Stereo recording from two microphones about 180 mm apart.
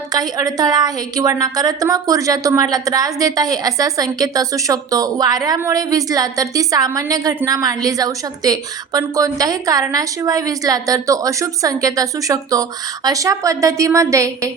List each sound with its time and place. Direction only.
0.1 s a woman's voice: 20° right (ahead or behind)